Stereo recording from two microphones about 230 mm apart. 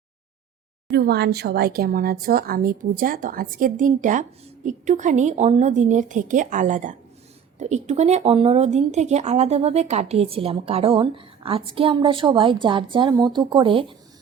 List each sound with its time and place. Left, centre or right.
0.9 s a woman's voice: right